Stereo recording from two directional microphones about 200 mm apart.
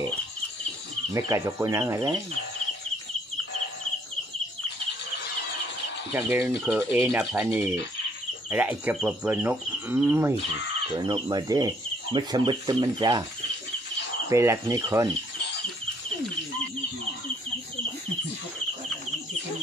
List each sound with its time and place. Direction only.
1.1 s speech: 15° right (ahead or behind)
6.1 s speech: 10° right (ahead or behind)
11.0 s speech: 20° right (ahead or behind)
14.3 s speech: 15° right (ahead or behind)